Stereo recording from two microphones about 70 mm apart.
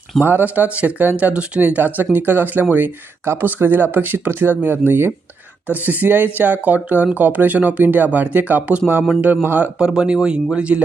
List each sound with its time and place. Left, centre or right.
0.2 s speech: right
5.6 s speech: right
9.7 s speech: centre